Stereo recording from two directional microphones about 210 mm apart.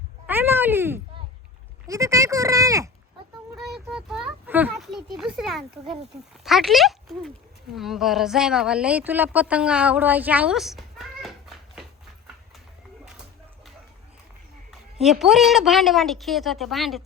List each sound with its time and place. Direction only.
0.3 s a sound: 10° right (ahead or behind)
1.9 s speech: 15° right (ahead or behind)
3.5 s a child's voice: centre (ahead or behind)
14.7 s speech: centre (ahead or behind)